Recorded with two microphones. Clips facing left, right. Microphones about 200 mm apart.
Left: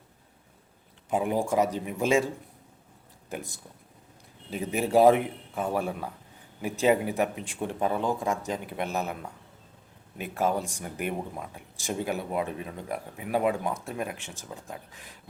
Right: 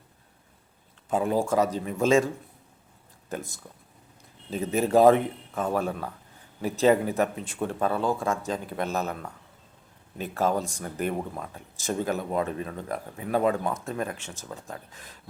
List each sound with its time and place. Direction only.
1.1 s speech: 15° left (ahead or behind)
3.2 s speech: 15° left (ahead or behind)